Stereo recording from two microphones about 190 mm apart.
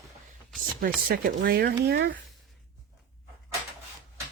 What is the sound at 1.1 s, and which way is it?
Speech, 50° right (ahead or behind).